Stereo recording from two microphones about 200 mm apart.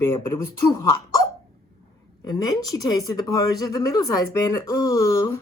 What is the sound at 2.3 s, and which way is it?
Speech, 20° left (ahead or behind).